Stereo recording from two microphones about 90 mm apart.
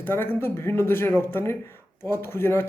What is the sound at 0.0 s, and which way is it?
Speech, 25° left (ahead or behind).